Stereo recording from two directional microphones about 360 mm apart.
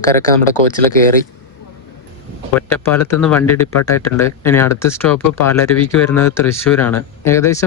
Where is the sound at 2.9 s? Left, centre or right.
Centre.